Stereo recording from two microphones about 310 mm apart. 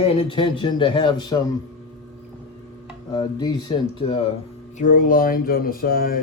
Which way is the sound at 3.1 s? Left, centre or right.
Centre.